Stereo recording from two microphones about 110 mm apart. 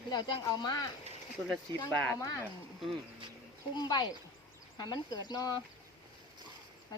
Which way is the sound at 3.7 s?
40° left (ahead or behind).